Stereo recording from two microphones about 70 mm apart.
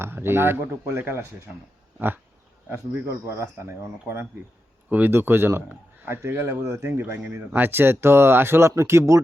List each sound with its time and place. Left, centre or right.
0.0 s speech: right
3.1 s speech: right
4.9 s speech: right